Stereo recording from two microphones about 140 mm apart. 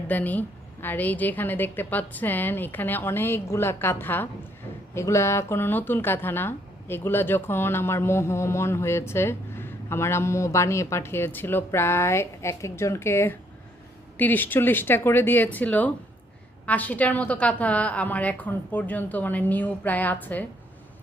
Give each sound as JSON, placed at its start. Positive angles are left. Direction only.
{"t": 0.1, "sound": "speech", "side_deg": 10}